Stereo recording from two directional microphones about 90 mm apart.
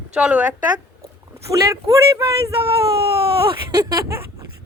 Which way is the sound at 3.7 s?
45° right (ahead or behind).